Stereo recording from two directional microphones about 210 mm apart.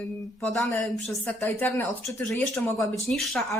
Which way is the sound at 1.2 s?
5° left (ahead or behind).